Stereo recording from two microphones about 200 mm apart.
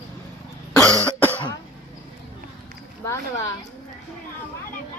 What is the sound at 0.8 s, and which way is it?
Cough, 15° right (ahead or behind).